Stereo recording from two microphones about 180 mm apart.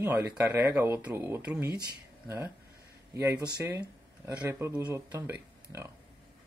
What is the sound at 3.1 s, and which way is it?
Speech, 20° right (ahead or behind).